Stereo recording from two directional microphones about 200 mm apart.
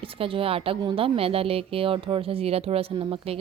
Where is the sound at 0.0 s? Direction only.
25° right (ahead or behind).